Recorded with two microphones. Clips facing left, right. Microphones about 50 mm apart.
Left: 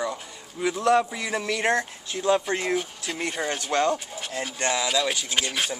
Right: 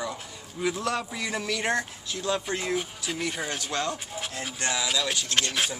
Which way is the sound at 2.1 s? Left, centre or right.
Left.